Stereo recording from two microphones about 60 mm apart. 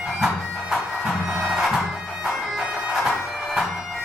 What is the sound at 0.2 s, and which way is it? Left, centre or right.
Bagpipes, centre.